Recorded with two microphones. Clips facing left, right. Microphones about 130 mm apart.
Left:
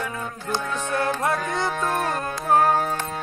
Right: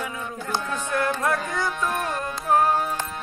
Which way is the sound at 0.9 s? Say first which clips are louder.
Even; 25° left (ahead or behind).